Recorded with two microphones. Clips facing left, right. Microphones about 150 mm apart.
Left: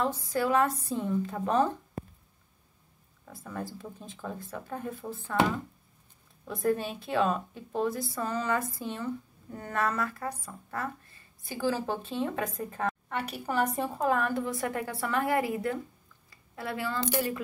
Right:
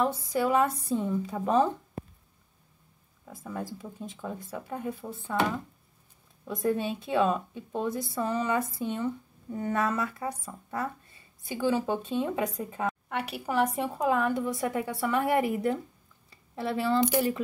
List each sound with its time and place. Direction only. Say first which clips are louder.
0.0 s a woman's voice: right 2 dB; 15° right (ahead or behind)
0.9 s a woman's voice: right 2 dB; 5° right (ahead or behind)
1.3 s a woman's voice: right 5 dB; 15° right (ahead or behind)
3.3 s a woman's voice: right 2 dB; 15° right (ahead or behind)
6.4 s a woman's voice: right 1 dB; 15° right (ahead or behind)
16.3 s a sound: right 4 dB; 30° right (ahead or behind)